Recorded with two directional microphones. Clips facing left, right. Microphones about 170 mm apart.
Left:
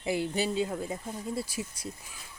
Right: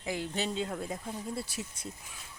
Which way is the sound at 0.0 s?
10° left (ahead or behind).